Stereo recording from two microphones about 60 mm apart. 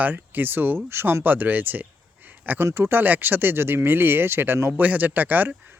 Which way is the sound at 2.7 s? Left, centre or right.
Right.